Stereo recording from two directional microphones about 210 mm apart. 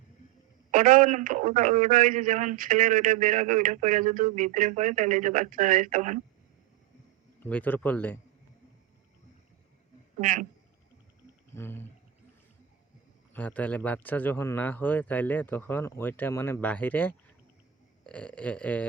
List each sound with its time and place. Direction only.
0.7 s a man's voice: 40° right (ahead or behind)
7.4 s a man's voice: 10° left (ahead or behind)
10.2 s a man's voice: 40° right (ahead or behind)
11.5 s a man's voice: 10° left (ahead or behind)
13.3 s a man's voice: 5° left (ahead or behind)
18.0 s a sound: 5° left (ahead or behind)